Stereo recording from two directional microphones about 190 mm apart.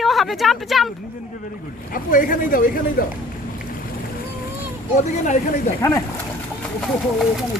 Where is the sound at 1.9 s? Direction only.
45° left (ahead or behind).